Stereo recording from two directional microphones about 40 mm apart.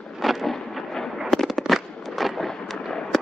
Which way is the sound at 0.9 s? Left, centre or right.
Centre.